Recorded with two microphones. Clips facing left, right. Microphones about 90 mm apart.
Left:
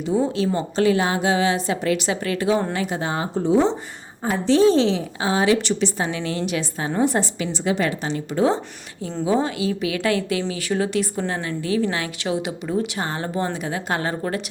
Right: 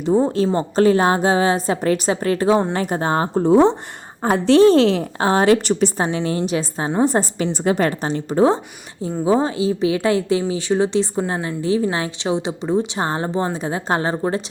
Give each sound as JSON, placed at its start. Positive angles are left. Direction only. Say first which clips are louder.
{"t": 0.2, "sound": "a woman's voice", "louder": "right 4 dB", "side_deg": -35}
{"t": 6.1, "sound": "a woman's voice", "louder": "right 4 dB", "side_deg": -30}